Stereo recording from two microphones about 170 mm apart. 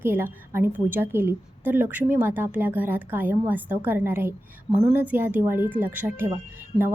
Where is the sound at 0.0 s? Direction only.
15° right (ahead or behind).